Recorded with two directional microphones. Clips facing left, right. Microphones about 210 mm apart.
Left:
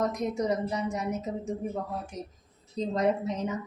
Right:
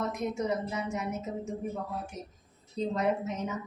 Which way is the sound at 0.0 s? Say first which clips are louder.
Left 3 dB; 35° left (ahead or behind).